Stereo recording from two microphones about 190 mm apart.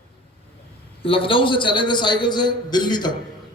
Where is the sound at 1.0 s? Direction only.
30° left (ahead or behind).